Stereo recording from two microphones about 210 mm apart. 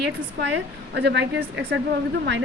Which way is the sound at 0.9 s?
55° right (ahead or behind).